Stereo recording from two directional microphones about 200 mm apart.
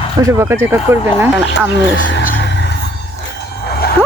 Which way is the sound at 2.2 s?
50° left (ahead or behind).